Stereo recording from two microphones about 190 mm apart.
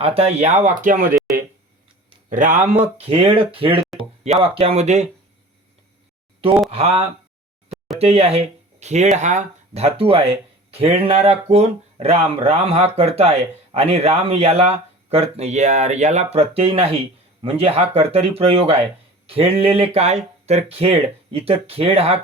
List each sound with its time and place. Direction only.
0.0 s speech: 30° right (ahead or behind)
2.3 s speech: 40° right (ahead or behind)
6.7 s speech: 30° right (ahead or behind)